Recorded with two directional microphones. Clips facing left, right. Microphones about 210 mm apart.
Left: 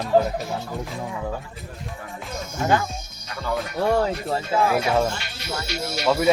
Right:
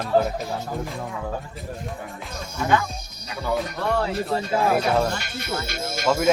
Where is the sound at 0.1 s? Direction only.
15° left (ahead or behind).